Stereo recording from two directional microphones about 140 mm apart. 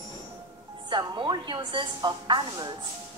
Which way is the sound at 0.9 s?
35° right (ahead or behind).